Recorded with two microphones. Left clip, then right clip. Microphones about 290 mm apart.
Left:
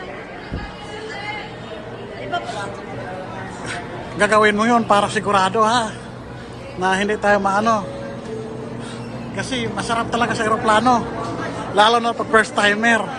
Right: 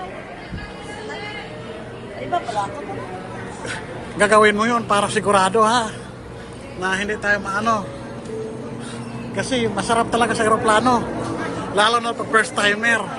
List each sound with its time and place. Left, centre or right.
4.2 s a man's voice: centre
9.3 s a man's voice: centre